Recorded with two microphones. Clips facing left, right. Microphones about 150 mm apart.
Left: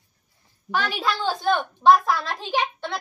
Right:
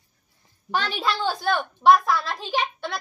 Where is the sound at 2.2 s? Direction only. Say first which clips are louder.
Left 1 dB; 25° left (ahead or behind).